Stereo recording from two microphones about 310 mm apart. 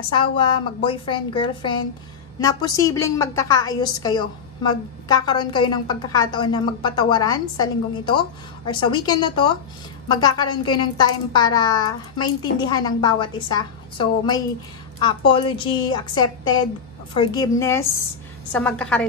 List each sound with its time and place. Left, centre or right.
0.1 s a woman's voice: centre